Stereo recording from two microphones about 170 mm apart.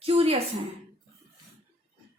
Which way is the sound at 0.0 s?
35° right (ahead or behind).